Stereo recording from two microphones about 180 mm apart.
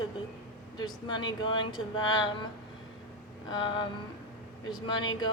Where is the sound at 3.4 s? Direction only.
25° left (ahead or behind).